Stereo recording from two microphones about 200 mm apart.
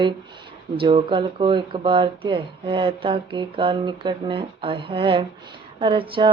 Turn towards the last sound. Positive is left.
turn(degrees=-25)  # may be behind; listen again after turning